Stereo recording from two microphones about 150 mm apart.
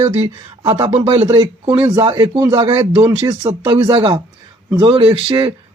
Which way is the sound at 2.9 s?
30° right (ahead or behind).